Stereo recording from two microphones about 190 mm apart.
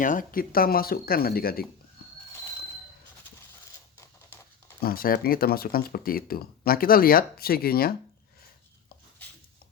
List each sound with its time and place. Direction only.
0.0 s speech: 45° left (ahead or behind)
4.8 s speech: 50° left (ahead or behind)